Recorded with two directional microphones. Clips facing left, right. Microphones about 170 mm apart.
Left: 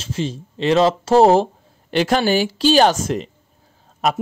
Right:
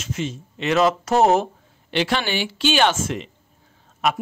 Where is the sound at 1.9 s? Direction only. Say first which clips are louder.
Left 6 dB; 40° left (ahead or behind).